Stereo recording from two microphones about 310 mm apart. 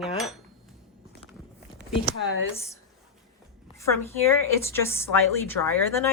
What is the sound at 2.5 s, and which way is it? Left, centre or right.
A woman's voice, centre.